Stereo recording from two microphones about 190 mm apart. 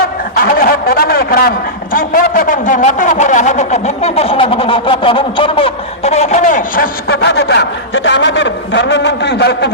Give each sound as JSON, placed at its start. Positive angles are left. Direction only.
{"t": 0.3, "sound": "a man's voice", "side_deg": 50}